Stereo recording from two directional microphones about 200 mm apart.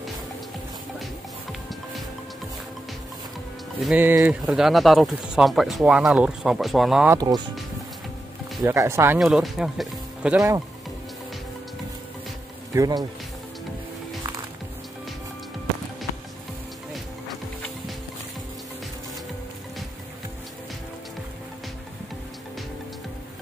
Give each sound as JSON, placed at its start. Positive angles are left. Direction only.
{"t": 3.8, "sound": "speech", "side_deg": -10}
{"t": 7.1, "sound": "speech", "side_deg": -20}
{"t": 8.6, "sound": "speech", "side_deg": -15}
{"t": 9.2, "sound": "speech", "side_deg": 0}
{"t": 12.7, "sound": "speech", "side_deg": -20}